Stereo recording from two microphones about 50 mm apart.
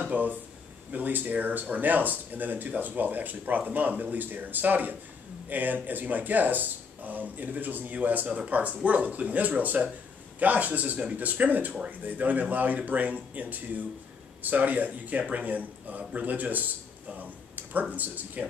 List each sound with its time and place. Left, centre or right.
0.1 s speech: right
17.2 s a sound: right
17.9 s speech: right